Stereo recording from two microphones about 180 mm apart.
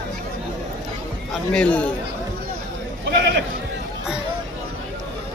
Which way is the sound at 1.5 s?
5° left (ahead or behind).